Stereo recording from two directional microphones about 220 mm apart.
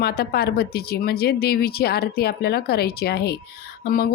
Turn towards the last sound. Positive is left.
turn(degrees=40)  # may be behind; listen again after turning